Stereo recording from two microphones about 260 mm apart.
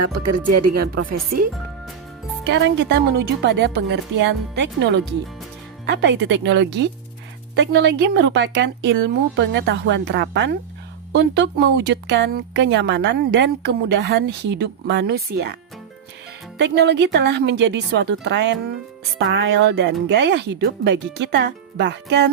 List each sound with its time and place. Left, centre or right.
0.1 s speech: right
2.4 s speech: right
16.6 s speech: right